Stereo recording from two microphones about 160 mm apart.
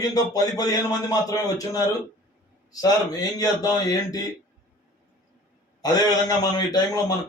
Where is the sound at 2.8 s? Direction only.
25° left (ahead or behind).